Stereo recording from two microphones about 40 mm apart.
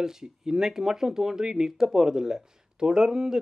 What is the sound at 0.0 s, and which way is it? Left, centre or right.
A man's voice, centre.